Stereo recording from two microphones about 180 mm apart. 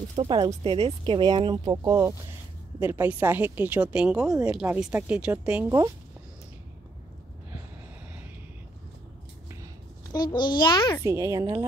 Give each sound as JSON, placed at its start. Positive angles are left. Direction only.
{"t": 0.2, "sound": "a woman's voice", "side_deg": -25}
{"t": 10.1, "sound": "a child's voice", "side_deg": 25}
{"t": 11.1, "sound": "a woman's voice", "side_deg": -15}